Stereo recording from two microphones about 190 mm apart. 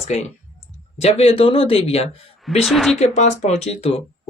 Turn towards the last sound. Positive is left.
turn(degrees=35)  # may be behind; listen again after turning